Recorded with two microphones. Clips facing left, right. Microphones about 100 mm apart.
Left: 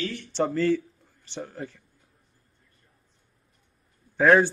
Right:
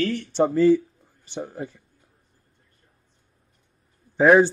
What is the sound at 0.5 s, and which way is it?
Speech, 15° right (ahead or behind).